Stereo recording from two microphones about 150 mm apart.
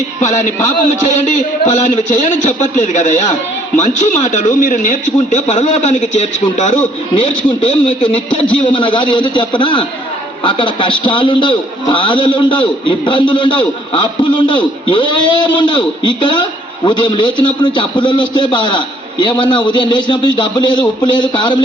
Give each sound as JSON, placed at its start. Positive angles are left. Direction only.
{"t": 0.2, "sound": "a man's voice", "side_deg": 50}
{"t": 8.0, "sound": "a man's voice", "side_deg": 35}